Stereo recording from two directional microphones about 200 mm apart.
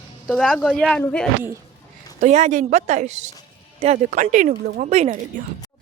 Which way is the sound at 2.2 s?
35° right (ahead or behind).